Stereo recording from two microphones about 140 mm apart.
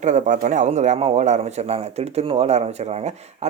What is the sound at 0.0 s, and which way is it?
A man's voice, 60° right (ahead or behind).